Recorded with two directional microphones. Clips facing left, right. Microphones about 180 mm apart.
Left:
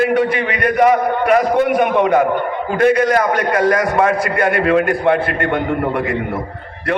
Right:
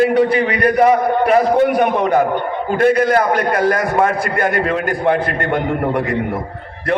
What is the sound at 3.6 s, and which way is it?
A man's voice, 35° right (ahead or behind).